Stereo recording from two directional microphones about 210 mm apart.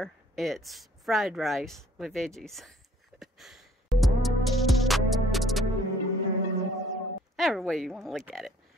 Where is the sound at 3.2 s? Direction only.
Centre (ahead or behind).